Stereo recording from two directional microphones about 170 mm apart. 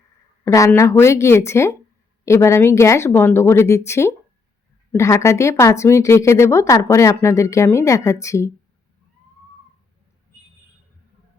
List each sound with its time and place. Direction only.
0.4 s speech: 15° left (ahead or behind)